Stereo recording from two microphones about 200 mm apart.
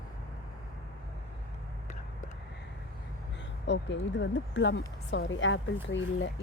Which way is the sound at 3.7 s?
65° left (ahead or behind).